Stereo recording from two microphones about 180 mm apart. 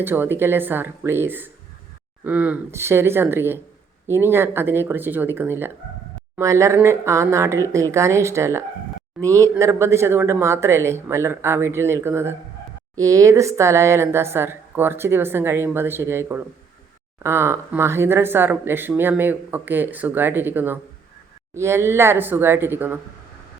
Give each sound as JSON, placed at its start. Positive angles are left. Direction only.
{"t": 0.0, "sound": "speech", "side_deg": -10}